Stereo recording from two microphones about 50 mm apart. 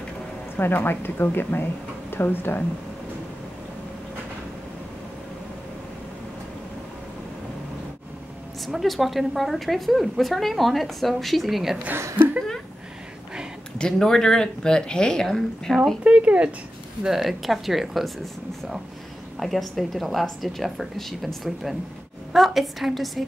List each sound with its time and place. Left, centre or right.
0.6 s a woman's voice: left
8.6 s a woman's voice: centre
13.7 s speech: centre
15.7 s a woman's voice: centre
16.0 s speech: right
17.0 s a woman's voice: centre